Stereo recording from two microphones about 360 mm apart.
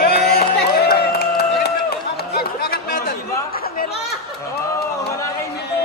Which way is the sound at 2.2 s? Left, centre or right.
Left.